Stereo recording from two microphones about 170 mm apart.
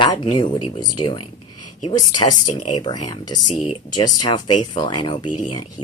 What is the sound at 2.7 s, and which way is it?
Speech, 25° left (ahead or behind).